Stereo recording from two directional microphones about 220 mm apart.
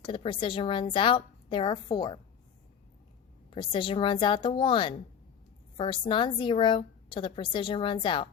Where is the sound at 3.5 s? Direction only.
20° left (ahead or behind).